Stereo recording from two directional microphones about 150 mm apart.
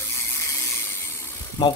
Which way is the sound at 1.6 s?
30° left (ahead or behind).